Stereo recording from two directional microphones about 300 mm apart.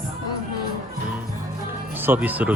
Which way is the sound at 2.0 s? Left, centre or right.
Centre.